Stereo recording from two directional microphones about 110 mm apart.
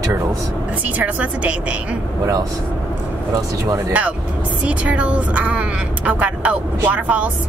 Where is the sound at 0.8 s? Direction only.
15° right (ahead or behind).